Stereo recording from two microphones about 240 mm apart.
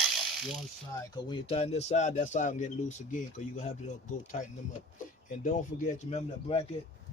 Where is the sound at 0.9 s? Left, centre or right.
Centre.